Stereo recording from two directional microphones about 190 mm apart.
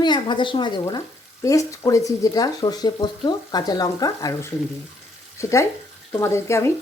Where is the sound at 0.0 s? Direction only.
25° left (ahead or behind).